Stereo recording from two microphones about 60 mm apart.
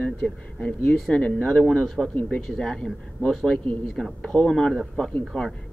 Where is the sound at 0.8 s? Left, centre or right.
Centre.